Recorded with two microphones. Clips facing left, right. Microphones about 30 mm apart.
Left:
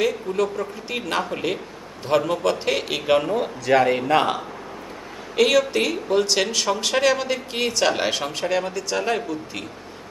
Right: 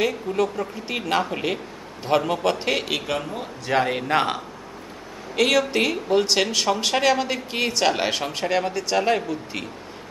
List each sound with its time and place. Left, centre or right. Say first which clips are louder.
0.0 s speech: left 1 dB; centre
3.6 s a man's voice: left 4 dB; left
4.1 s speech: left 2 dB; right
5.3 s speech: left 2 dB; centre
5.6 s speech: even; centre